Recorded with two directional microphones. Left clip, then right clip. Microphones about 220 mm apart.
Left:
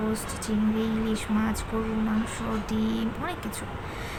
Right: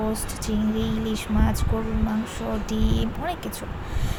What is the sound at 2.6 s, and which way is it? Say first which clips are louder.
Speech: right 2 dB; 15° right (ahead or behind).